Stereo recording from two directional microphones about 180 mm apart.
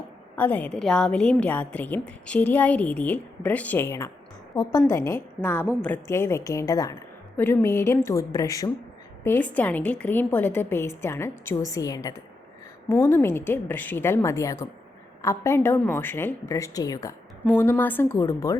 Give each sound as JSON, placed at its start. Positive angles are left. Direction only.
{"t": 0.3, "sound": "a woman's voice", "side_deg": 10}